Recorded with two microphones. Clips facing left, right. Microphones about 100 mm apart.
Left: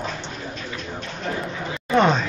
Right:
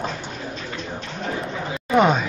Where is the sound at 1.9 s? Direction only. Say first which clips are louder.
Right 1 dB; 10° right (ahead or behind).